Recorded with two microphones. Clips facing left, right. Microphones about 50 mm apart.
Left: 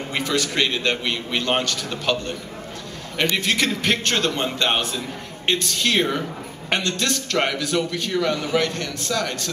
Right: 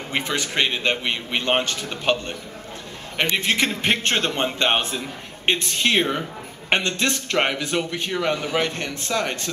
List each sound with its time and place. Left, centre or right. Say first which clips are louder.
0.1 s a man's voice: left 1 dB; right
3.3 s a man's voice: even; right